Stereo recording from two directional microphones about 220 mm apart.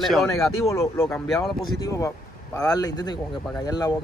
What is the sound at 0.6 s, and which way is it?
Speech, 15° left (ahead or behind).